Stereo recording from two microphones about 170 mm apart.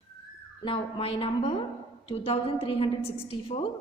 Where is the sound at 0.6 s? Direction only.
30° left (ahead or behind).